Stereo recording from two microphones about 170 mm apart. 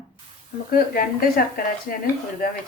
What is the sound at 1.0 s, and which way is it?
Speech, 60° left (ahead or behind).